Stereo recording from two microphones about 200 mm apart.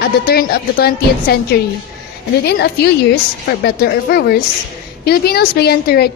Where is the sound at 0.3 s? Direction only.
50° left (ahead or behind).